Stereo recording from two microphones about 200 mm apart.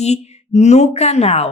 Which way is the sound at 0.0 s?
35° left (ahead or behind).